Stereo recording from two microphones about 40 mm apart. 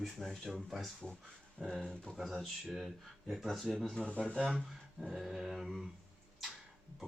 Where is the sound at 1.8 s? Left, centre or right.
Centre.